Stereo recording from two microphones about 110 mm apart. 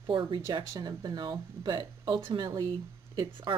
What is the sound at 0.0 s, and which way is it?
Speech, 45° right (ahead or behind).